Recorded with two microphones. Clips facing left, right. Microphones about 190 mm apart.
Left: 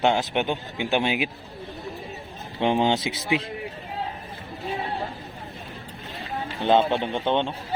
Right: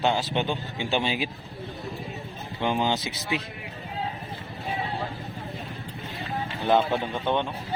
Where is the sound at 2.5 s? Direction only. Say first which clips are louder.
Left 4 dB; 25° left (ahead or behind).